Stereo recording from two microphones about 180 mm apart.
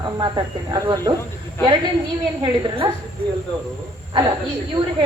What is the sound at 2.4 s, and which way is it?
Speech, 30° right (ahead or behind).